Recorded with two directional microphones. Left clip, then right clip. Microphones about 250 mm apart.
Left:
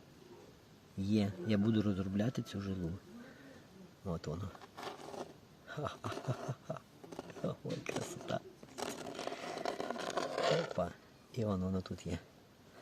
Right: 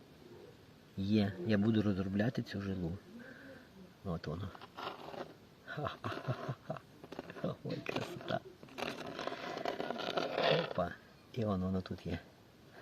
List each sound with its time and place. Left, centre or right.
0.9 s a man's voice: centre
4.0 s a man's voice: centre
5.1 s a sound: centre
8.8 s vehicle: centre
10.3 s a sound: centre
10.8 s speech: centre